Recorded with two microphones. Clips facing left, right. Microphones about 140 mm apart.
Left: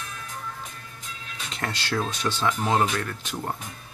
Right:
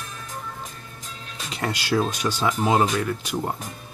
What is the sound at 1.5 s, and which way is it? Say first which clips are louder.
Speech: right 5 dB; 10° right (ahead or behind).